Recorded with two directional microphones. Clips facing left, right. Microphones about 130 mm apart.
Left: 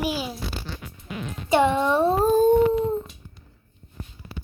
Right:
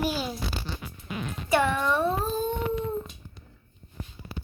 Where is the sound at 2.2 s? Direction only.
50° left (ahead or behind).